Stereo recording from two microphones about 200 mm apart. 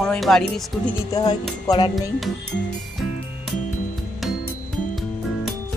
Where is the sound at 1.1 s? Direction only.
20° left (ahead or behind).